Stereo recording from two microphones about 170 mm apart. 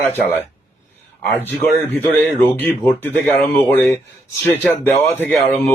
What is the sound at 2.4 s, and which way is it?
A man's voice, 15° left (ahead or behind).